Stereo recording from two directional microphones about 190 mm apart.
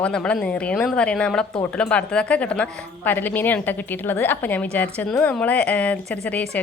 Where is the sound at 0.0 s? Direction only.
5° left (ahead or behind).